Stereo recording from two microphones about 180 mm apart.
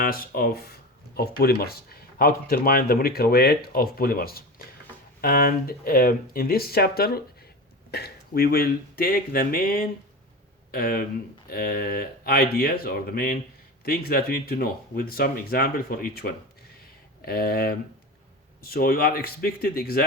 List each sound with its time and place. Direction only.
0.0 s speech: 55° left (ahead or behind)